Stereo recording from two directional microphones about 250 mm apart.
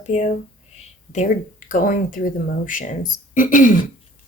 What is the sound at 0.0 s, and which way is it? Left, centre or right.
Speech, left.